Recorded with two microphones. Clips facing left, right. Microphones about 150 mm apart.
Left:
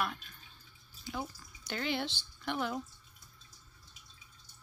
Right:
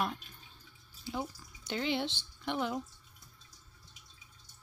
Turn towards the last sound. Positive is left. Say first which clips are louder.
# right 1 dB
turn(degrees=-20)  # may be behind; listen again after turning